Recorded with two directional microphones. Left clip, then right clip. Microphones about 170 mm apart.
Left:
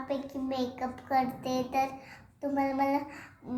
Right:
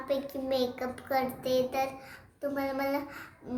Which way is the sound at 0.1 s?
35° right (ahead or behind).